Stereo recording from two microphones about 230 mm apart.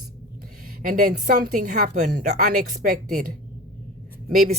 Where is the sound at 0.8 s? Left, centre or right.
Right.